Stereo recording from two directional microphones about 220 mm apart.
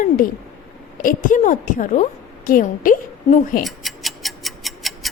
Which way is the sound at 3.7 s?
Centre (ahead or behind).